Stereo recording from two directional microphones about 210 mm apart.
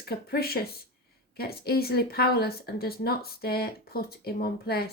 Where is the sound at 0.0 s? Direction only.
50° left (ahead or behind).